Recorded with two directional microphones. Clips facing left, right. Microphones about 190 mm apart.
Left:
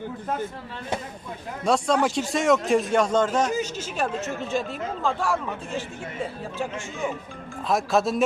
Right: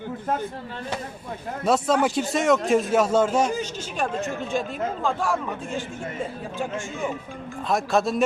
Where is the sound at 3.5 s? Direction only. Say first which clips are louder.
Left 1 dB; 5° left (ahead or behind).